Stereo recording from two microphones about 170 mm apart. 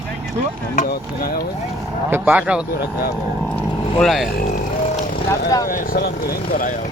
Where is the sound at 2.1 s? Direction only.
10° right (ahead or behind).